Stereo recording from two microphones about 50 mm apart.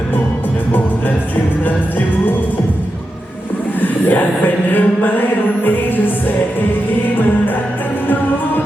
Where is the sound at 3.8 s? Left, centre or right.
Left.